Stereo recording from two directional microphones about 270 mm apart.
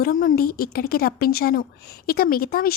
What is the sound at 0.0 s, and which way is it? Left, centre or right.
A woman's voice, left.